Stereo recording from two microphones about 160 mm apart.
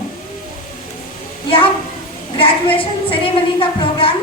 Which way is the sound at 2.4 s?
35° left (ahead or behind).